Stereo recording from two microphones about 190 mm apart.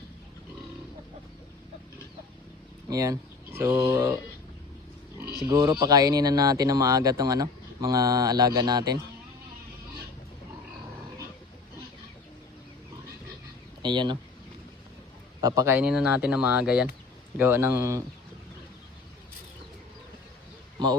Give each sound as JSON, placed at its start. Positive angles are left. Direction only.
{"t": 2.9, "sound": "speech", "side_deg": -15}
{"t": 5.5, "sound": "speech", "side_deg": -20}
{"t": 13.8, "sound": "speech", "side_deg": -25}
{"t": 15.4, "sound": "speech", "side_deg": -20}
{"t": 15.9, "sound": "speech", "side_deg": -5}